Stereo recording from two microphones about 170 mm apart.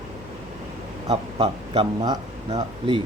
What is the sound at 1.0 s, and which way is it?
Speech, 35° right (ahead or behind).